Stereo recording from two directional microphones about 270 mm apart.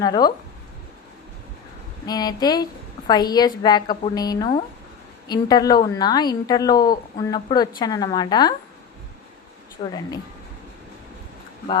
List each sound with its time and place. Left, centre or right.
0.0 s a woman's voice: centre
2.0 s a woman's voice: centre
9.8 s speech: left